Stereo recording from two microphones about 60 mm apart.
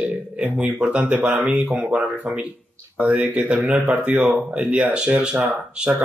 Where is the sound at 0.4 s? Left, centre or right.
Right.